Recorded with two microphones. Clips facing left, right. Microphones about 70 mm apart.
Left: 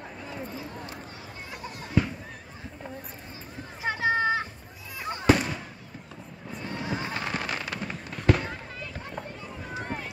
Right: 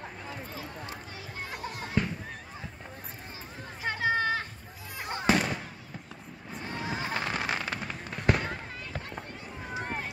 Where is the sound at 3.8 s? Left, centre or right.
Centre.